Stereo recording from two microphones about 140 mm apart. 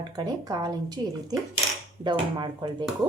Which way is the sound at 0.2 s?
30° right (ahead or behind).